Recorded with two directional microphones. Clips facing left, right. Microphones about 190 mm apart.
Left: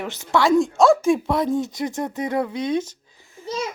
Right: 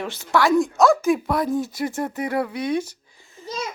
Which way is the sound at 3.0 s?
20° left (ahead or behind).